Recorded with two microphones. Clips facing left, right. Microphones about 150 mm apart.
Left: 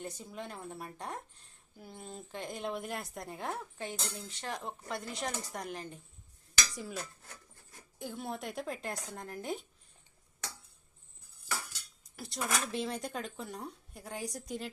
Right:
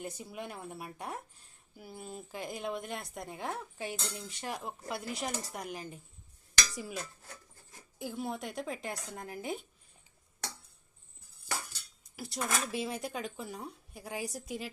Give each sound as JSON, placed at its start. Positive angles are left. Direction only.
{"t": 0.0, "sound": "a woman's voice", "side_deg": -10}
{"t": 12.1, "sound": "a woman's voice", "side_deg": 0}